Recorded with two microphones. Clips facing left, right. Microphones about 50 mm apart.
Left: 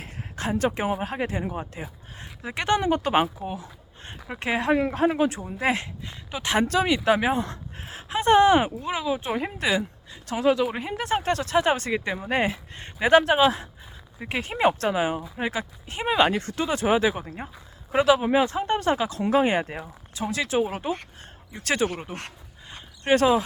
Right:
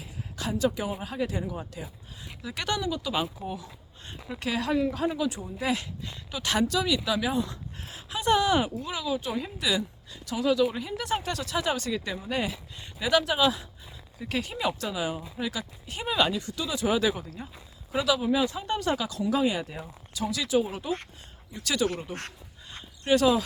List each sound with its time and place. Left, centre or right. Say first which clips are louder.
0.5 s a woman's voice: left 3 dB; left
2.9 s speech: left 8 dB; left
3.4 s a woman's voice: left 3 dB; left
6.7 s a woman's voice: left 6 dB; left
9.3 s speech: left 5 dB; left
9.6 s a woman's voice: left 3 dB; left
16.3 s a woman's voice: left 5 dB; left
19.2 s speech: left 5 dB; left
20.1 s a woman's voice: left 2 dB; left
22.7 s a sound: left 2 dB; left